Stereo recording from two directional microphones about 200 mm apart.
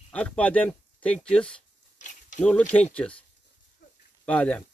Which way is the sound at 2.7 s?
5° left (ahead or behind).